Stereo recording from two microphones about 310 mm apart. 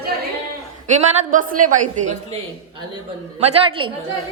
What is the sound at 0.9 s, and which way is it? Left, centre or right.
A woman's voice, right.